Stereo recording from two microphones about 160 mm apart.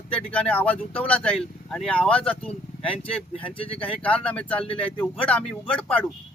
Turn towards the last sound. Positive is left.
turn(degrees=10)  # may be behind; listen again after turning